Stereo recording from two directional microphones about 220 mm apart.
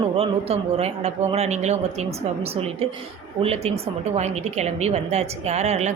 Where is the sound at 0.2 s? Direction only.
25° right (ahead or behind).